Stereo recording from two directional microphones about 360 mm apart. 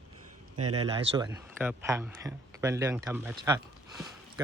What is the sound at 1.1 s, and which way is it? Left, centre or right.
Speech, centre.